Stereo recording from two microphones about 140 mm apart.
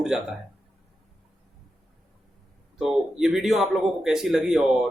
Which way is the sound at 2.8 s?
5° right (ahead or behind).